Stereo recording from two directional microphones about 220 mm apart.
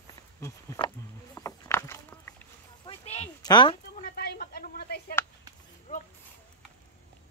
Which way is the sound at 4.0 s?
45° left (ahead or behind).